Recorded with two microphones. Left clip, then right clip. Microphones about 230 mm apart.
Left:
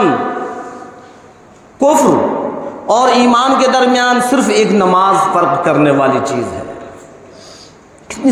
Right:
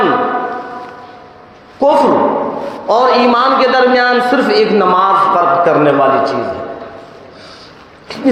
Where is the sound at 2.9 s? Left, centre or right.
Left.